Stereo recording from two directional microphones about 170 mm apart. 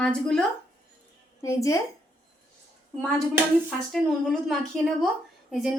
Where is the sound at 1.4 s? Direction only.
20° left (ahead or behind).